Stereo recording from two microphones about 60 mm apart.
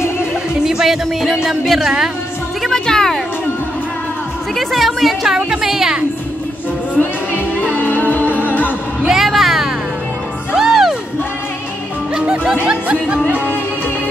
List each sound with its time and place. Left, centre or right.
0.7 s a woman's voice: centre
2.7 s music: centre
4.6 s a woman's voice: centre
7.0 s music: left
9.0 s music: centre
12.2 s music: centre
12.6 s speech: right